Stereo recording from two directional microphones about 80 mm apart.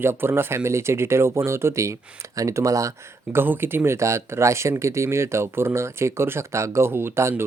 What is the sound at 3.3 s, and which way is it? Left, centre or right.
Speech, right.